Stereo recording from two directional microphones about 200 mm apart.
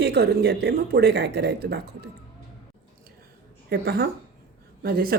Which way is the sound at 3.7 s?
50° right (ahead or behind).